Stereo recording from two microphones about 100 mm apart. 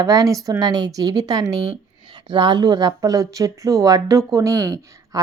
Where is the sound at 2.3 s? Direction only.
55° right (ahead or behind).